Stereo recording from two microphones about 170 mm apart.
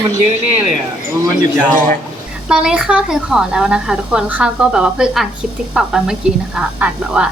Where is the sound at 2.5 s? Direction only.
5° right (ahead or behind).